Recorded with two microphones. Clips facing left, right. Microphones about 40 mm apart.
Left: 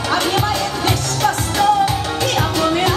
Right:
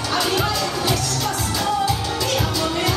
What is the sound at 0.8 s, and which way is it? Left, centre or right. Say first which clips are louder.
Music: left 5 dB; left.